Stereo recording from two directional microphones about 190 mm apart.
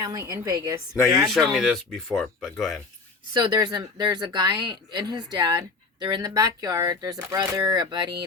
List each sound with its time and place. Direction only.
0.0 s speech: 20° right (ahead or behind)
1.3 s speech: centre (ahead or behind)
3.3 s speech: 20° right (ahead or behind)